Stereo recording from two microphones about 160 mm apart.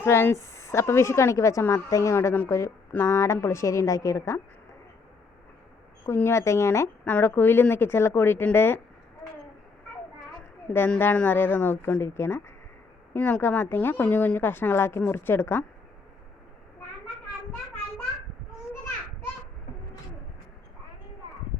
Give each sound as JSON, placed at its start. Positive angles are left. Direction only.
{"t": 0.0, "sound": "a woman's voice", "side_deg": 15}
{"t": 6.1, "sound": "a woman's voice", "side_deg": 15}
{"t": 10.7, "sound": "a woman's voice", "side_deg": 10}